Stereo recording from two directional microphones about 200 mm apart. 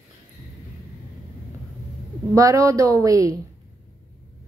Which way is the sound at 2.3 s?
15° right (ahead or behind).